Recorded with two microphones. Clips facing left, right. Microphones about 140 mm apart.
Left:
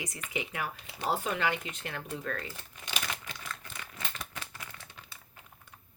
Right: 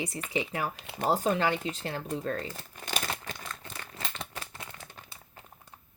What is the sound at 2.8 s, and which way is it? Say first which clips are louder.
Crumpling: right 4 dB; 40° right (ahead or behind).